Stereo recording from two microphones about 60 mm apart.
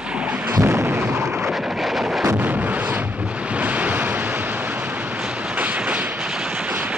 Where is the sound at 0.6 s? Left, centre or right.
Right.